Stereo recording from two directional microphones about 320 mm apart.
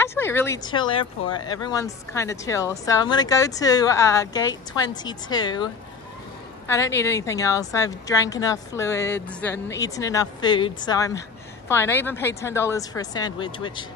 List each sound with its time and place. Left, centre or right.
0.0 s speech: centre
6.7 s speech: centre